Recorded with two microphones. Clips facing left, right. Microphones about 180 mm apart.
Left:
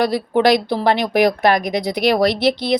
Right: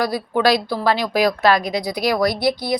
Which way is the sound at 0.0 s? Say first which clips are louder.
Left 3 dB; 20° left (ahead or behind).